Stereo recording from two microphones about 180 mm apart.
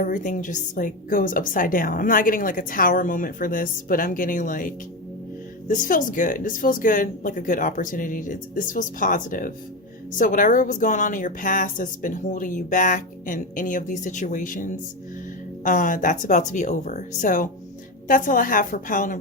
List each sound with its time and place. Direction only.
0.0 s a woman's voice: 45° left (ahead or behind)